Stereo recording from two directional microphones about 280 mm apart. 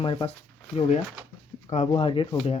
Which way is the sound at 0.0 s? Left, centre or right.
Centre.